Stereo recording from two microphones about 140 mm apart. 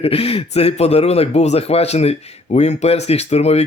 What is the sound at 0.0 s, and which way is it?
Speech, 45° left (ahead or behind).